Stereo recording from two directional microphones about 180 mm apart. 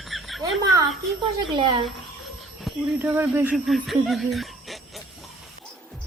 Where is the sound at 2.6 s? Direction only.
10° right (ahead or behind).